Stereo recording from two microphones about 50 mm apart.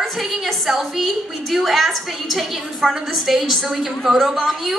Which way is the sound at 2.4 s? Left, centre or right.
Centre.